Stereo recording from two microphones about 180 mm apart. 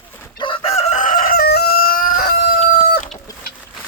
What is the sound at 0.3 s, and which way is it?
Chicken, 30° left (ahead or behind).